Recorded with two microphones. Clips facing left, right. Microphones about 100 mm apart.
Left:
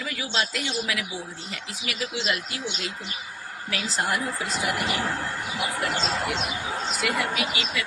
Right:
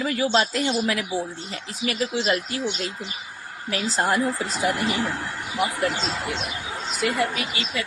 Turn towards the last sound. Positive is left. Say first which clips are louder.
# even
turn(degrees=-35)  # may be behind; listen again after turning